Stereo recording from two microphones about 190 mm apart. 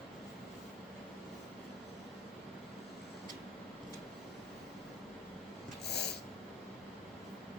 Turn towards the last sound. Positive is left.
turn(degrees=60)  # may be behind; listen again after turning